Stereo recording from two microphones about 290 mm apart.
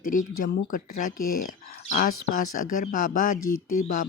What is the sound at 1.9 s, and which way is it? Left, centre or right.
Speech, left.